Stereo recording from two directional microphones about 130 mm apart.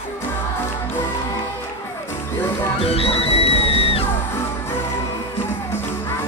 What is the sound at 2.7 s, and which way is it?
Music, 50° left (ahead or behind).